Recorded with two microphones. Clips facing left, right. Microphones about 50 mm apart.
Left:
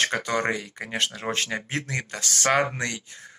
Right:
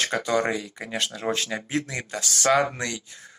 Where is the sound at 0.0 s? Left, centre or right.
Left.